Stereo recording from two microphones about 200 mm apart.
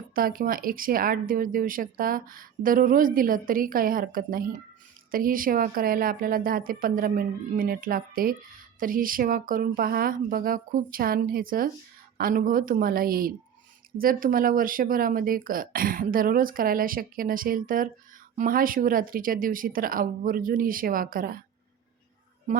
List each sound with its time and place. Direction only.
0.1 s speech: 45° right (ahead or behind)